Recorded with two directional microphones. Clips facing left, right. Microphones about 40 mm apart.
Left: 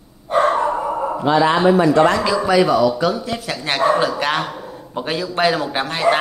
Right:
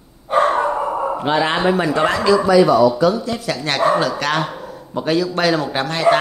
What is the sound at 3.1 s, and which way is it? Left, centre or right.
Speech, centre.